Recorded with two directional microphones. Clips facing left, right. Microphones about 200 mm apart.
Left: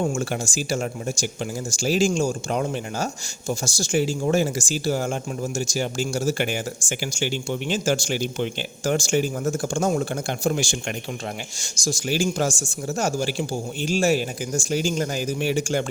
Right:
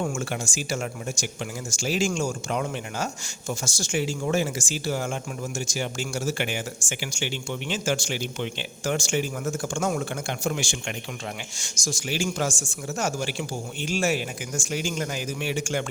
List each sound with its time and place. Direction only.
0.0 s speech: 35° left (ahead or behind)